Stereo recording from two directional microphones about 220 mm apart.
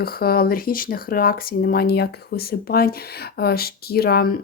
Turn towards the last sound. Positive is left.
turn(degrees=45)  # may be behind; listen again after turning